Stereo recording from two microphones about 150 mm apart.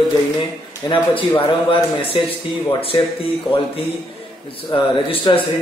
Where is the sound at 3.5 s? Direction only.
5° right (ahead or behind).